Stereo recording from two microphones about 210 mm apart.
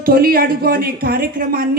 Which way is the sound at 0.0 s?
45° right (ahead or behind).